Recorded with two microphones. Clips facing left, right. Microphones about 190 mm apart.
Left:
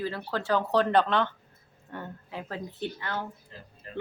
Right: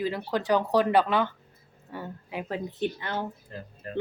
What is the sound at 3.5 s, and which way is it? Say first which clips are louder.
Speech: right 8 dB; 55° right (ahead or behind).